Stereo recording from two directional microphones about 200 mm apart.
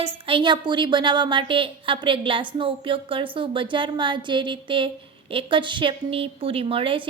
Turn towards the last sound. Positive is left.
turn(degrees=-25)  # may be behind; listen again after turning